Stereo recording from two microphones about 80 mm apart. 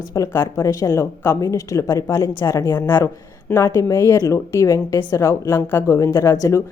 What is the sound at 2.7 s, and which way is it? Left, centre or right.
A woman's voice, left.